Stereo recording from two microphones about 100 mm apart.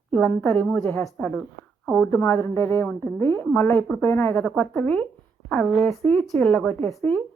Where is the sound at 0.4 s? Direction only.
15° left (ahead or behind).